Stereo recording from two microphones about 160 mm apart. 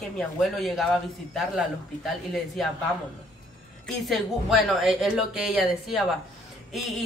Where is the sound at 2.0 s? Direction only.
Centre (ahead or behind).